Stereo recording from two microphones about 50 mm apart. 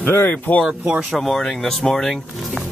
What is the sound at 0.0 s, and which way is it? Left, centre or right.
Speech, left.